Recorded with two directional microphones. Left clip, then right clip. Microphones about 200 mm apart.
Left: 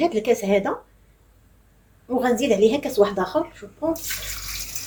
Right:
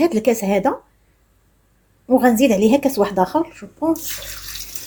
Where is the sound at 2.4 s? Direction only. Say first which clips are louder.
Right 4 dB; 15° right (ahead or behind).